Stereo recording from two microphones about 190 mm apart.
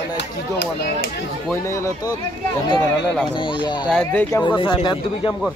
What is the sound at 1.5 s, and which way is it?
Speech, 15° left (ahead or behind).